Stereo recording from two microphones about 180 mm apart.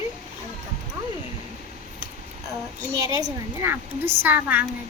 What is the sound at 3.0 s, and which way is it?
A child's voice, 20° right (ahead or behind).